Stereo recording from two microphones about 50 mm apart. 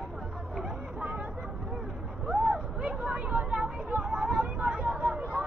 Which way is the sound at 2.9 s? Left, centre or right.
Right.